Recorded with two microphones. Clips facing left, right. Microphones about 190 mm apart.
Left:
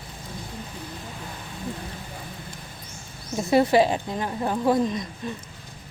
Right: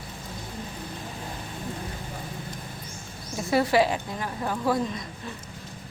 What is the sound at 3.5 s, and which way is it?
A woman's voice, 25° left (ahead or behind).